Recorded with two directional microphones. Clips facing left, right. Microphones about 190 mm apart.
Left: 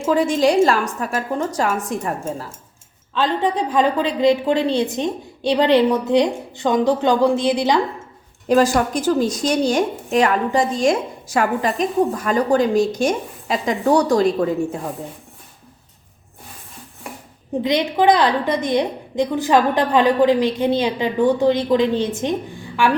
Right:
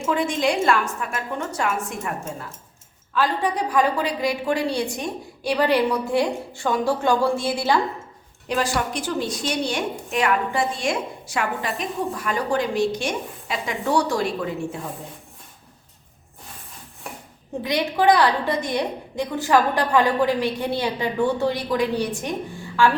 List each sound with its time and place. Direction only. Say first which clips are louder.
0.0 s a woman's voice: left 6 dB; 40° left (ahead or behind)
3.2 s a woman's voice: left 3 dB; 20° left (ahead or behind)
8.4 s a woman's voice: left 8 dB; 45° left (ahead or behind)
17.6 s a woman's voice: left 4 dB; 20° left (ahead or behind)